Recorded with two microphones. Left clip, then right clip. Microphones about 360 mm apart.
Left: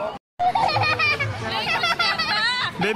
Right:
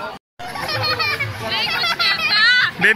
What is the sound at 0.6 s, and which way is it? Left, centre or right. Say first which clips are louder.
Children playing: left 1 dB; centre.